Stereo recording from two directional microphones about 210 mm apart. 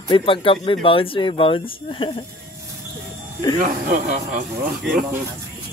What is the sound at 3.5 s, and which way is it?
Speech, 35° right (ahead or behind).